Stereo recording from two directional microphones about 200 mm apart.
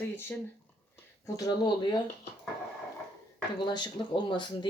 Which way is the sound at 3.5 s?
20° left (ahead or behind).